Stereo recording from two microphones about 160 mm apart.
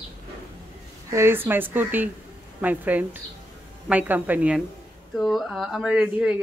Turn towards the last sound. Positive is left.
turn(degrees=-5)  # may be behind; listen again after turning